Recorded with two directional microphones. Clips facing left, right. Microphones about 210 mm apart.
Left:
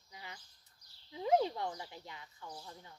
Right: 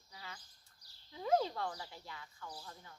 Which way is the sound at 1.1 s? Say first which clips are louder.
Left 2 dB; 20° left (ahead or behind).